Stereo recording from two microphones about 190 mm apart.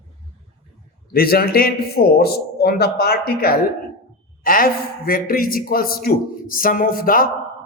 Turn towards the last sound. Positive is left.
turn(degrees=50)  # may be behind; listen again after turning